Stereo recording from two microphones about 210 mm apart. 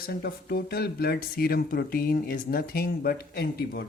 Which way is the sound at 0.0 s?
50° left (ahead or behind).